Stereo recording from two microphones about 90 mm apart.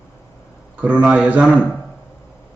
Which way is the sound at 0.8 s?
15° right (ahead or behind).